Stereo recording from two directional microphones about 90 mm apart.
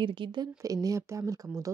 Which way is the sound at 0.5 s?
40° right (ahead or behind).